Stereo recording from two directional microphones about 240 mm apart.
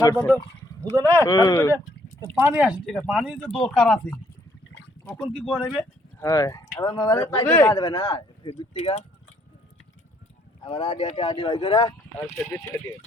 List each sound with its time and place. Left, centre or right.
0.0 s speech: centre
2.2 s speech: centre
2.8 s speech: centre
5.0 s speech: centre
6.1 s speech: centre
10.6 s speech: left